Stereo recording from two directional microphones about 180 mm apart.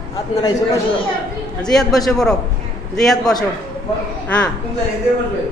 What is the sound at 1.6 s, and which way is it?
A man's voice, 5° left (ahead or behind).